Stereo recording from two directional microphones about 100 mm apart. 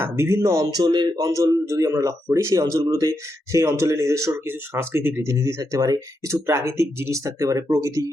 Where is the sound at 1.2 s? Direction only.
35° right (ahead or behind).